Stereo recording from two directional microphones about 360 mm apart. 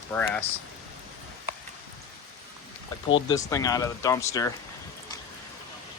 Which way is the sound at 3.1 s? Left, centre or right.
Centre.